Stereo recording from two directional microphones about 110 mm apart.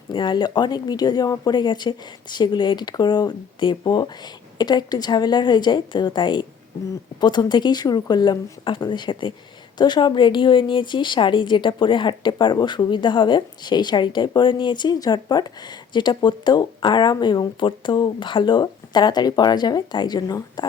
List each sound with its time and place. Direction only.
0.1 s speech: 45° left (ahead or behind)